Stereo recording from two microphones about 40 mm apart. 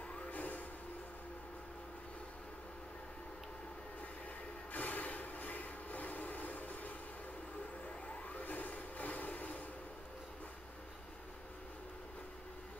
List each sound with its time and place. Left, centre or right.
0.3 s music: left
4.7 s train: left
8.3 s a sound: left